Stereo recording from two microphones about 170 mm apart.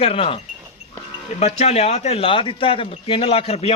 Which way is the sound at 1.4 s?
40° left (ahead or behind).